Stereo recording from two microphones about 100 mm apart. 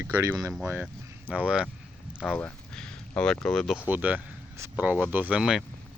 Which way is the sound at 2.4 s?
10° left (ahead or behind).